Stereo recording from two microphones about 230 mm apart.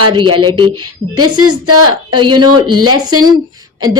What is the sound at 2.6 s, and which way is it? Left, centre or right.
Speech, right.